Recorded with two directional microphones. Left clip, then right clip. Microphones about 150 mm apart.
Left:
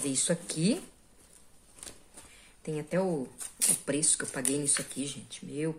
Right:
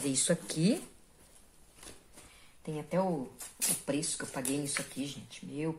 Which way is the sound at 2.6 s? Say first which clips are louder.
Left 2 dB; 35° left (ahead or behind).